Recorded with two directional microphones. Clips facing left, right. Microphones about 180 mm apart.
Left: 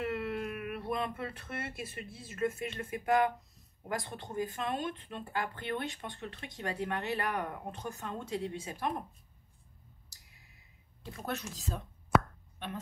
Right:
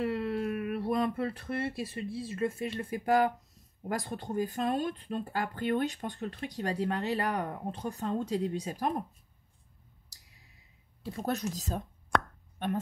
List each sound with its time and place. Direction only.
0.0 s speech: 30° right (ahead or behind)
11.1 s speech: 35° right (ahead or behind)
12.1 s plop: 5° left (ahead or behind)
12.5 s a woman's voice: 45° right (ahead or behind)